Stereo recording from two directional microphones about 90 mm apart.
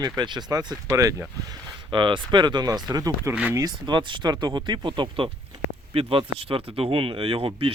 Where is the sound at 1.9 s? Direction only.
65° right (ahead or behind); by 3.3 s 40° right (ahead or behind).